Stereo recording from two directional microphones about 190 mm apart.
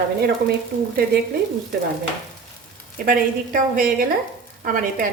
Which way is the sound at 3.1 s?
45° right (ahead or behind).